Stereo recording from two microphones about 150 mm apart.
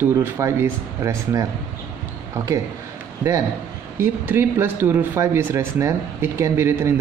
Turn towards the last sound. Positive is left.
turn(degrees=-15)  # may be behind; listen again after turning